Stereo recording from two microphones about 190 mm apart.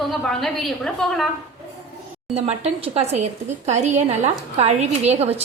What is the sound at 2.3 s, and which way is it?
A woman's voice, 35° right (ahead or behind).